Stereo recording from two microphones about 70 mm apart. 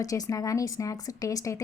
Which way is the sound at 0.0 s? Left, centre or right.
Left.